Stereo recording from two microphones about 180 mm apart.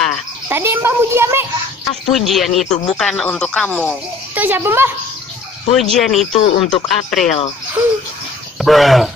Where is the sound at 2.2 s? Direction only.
Centre (ahead or behind).